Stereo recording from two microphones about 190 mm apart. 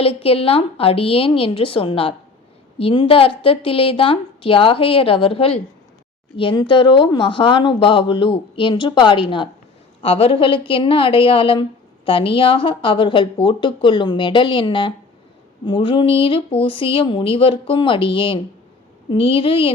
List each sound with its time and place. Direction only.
0.0 s speech: 30° left (ahead or behind)